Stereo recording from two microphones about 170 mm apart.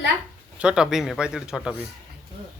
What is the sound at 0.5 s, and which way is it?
Speech, 5° right (ahead or behind).